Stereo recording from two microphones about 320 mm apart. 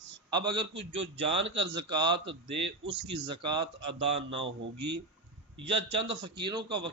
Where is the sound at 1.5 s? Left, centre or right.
Centre.